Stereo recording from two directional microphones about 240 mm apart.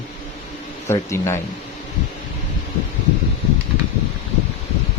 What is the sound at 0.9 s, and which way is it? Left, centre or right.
Speech, centre.